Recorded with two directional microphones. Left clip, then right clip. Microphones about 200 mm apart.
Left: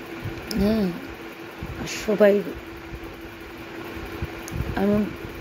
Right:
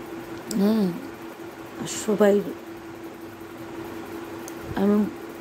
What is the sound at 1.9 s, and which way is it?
Speech, 15° right (ahead or behind).